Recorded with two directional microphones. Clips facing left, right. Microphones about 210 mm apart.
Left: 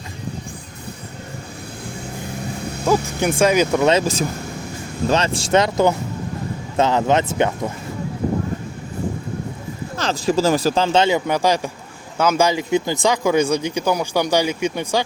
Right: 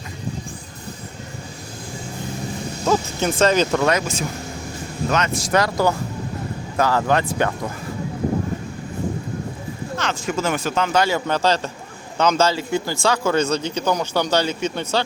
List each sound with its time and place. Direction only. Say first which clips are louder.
2.8 s speech: left 2 dB; 10° left (ahead or behind)
3.8 s speech: left 4 dB; 30° left (ahead or behind)
10.0 s speech: left 6 dB; 35° left (ahead or behind); by 15.0 s 10° left (ahead or behind)